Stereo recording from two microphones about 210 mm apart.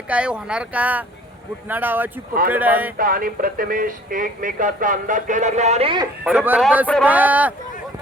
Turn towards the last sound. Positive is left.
turn(degrees=-5)  # may be behind; listen again after turning